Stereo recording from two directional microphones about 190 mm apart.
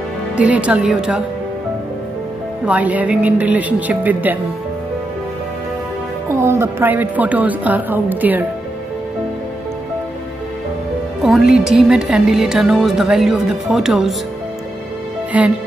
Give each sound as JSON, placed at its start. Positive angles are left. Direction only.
{"t": 0.4, "sound": "a woman's voice", "side_deg": -5}
{"t": 2.6, "sound": "a woman's voice", "side_deg": -10}
{"t": 6.3, "sound": "a woman's voice", "side_deg": -15}
{"t": 11.2, "sound": "speech", "side_deg": 0}
{"t": 15.3, "sound": "a woman's voice", "side_deg": -5}